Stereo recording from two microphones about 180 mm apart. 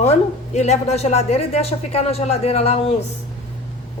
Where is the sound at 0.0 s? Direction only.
35° left (ahead or behind).